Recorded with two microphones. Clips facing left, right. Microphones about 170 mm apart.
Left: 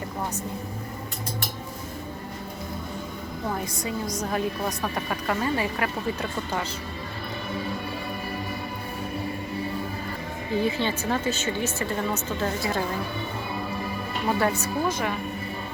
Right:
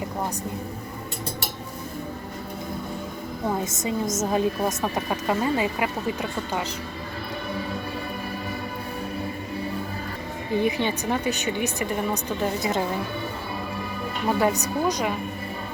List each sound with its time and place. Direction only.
3.6 s a woman's voice: 20° right (ahead or behind)
10.6 s speech: 15° right (ahead or behind)
14.3 s speech: 15° right (ahead or behind)